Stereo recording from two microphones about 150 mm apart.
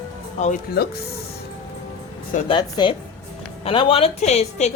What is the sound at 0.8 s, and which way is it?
Speech, 90° left.